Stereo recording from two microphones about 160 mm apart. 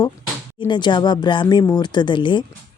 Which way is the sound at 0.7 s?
30° left (ahead or behind).